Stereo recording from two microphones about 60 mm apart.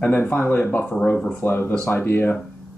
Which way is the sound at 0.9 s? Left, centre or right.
Centre.